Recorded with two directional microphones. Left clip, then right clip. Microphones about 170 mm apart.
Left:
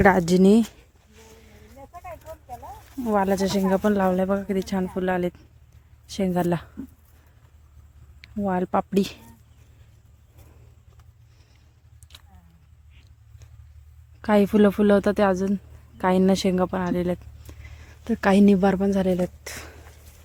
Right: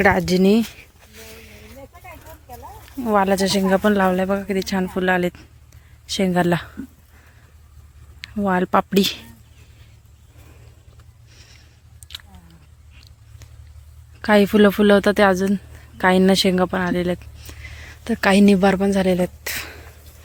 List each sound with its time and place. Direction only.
0.0 s speech: 25° left (ahead or behind)
1.4 s snake: 30° left (ahead or behind)
3.1 s speech: 10° left (ahead or behind)
8.2 s speech: 5° left (ahead or behind)
11.3 s a sound: 15° left (ahead or behind)
12.1 s chewing: 10° left (ahead or behind)
14.2 s speech: 15° left (ahead or behind)